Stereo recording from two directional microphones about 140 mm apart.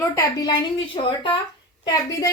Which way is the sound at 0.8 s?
35° left (ahead or behind).